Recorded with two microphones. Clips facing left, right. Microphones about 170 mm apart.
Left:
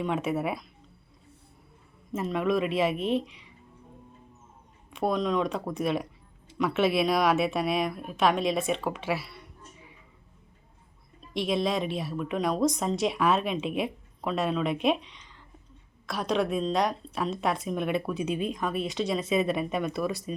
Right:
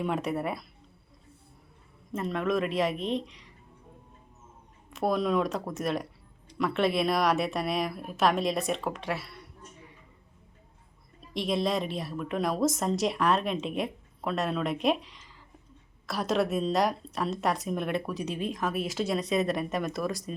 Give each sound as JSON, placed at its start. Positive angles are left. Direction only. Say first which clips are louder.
{"t": 0.0, "sound": "a woman's voice", "louder": "left 1 dB", "side_deg": 0}
{"t": 2.1, "sound": "a woman's voice", "louder": "left 2 dB", "side_deg": 5}
{"t": 4.9, "sound": "a woman's voice", "louder": "even", "side_deg": -5}
{"t": 11.3, "sound": "a woman's voice", "louder": "left 1 dB", "side_deg": 0}
{"t": 18.1, "sound": "speech", "louder": "left 4 dB", "side_deg": -40}
{"t": 18.3, "sound": "a woman's voice", "louder": "left 1 dB", "side_deg": 0}